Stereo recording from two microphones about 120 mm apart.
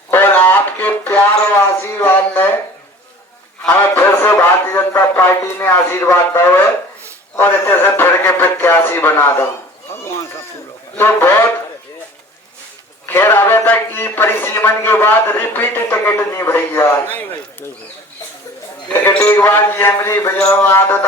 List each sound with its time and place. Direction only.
0.1 s a sound: 15° left (ahead or behind)
3.6 s speech: 15° left (ahead or behind)
10.9 s a man's voice: 20° left (ahead or behind)
13.1 s speech: 20° left (ahead or behind)
18.9 s speech: 10° left (ahead or behind)